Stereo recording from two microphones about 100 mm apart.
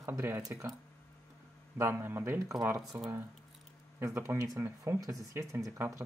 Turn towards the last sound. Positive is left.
turn(degrees=-25)  # may be behind; listen again after turning